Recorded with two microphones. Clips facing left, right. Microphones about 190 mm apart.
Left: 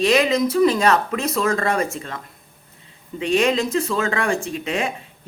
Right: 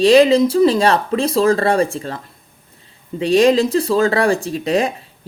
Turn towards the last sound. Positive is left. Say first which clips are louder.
# right 6 dB
turn(degrees=-35)  # may be behind; listen again after turning